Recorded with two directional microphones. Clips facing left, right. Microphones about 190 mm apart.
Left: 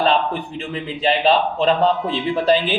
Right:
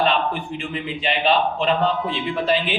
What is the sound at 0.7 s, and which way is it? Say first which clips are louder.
Speech: left 6 dB; 35° left (ahead or behind).